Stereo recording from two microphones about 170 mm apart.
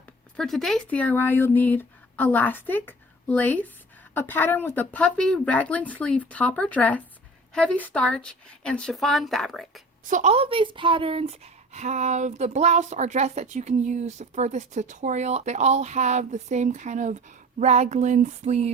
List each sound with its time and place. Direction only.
0.3 s speech: centre (ahead or behind)
10.0 s speech: 50° right (ahead or behind)